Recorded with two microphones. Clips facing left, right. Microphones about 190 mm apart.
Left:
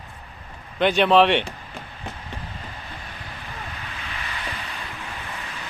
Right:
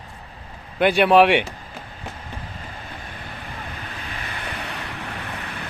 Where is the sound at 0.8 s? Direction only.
10° right (ahead or behind).